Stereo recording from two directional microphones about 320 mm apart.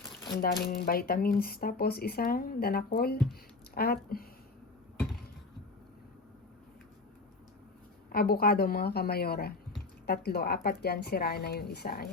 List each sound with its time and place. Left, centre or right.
0.3 s speech: left
8.1 s speech: left